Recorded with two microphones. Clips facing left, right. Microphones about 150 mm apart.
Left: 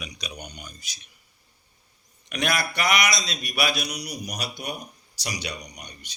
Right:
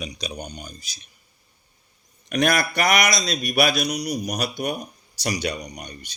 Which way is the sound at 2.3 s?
45° right (ahead or behind).